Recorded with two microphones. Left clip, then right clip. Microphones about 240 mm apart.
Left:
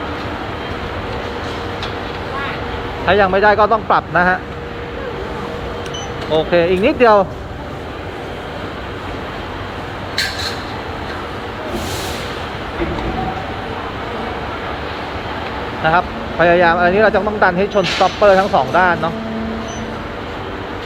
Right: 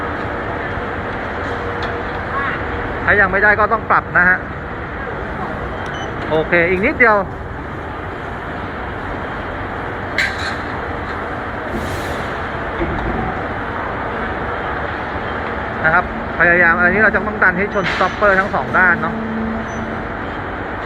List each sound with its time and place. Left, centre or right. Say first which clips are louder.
3.1 s speech: left 1 dB; left
6.3 s speech: left 1 dB; left
15.9 s speech: even; left